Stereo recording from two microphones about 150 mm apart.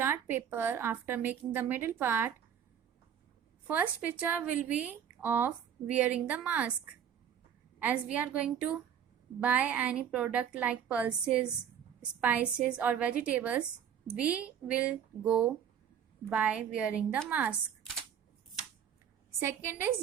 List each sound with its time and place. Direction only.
0.0 s speech: 15° right (ahead or behind)
3.7 s speech: 10° right (ahead or behind)
8.1 s speech: 10° right (ahead or behind)
19.4 s speech: 15° right (ahead or behind)